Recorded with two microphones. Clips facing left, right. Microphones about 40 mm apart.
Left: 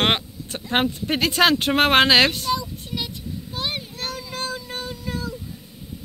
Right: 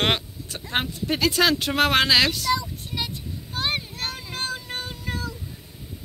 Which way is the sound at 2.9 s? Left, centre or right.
Right.